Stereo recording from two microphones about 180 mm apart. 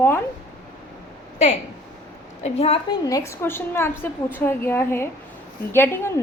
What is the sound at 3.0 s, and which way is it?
A woman's voice, 15° left (ahead or behind).